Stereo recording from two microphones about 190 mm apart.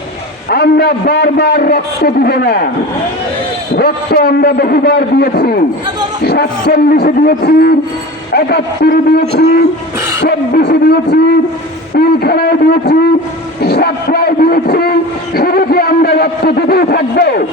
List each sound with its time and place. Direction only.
0.5 s a man's voice: 60° left (ahead or behind)
3.8 s a man's voice: 55° left (ahead or behind)
10.2 s a man's voice: 55° left (ahead or behind)